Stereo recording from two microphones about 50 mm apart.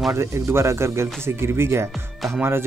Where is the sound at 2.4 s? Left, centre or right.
Right.